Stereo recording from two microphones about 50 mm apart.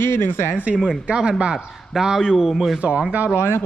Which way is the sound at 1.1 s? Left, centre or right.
Centre.